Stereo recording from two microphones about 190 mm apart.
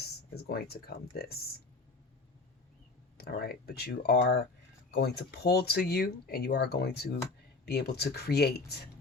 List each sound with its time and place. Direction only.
0.0 s speech: 55° left (ahead or behind)
3.2 s speech: 55° left (ahead or behind)